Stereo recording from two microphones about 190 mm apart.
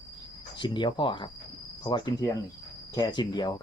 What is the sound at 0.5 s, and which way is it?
Speech, 25° left (ahead or behind).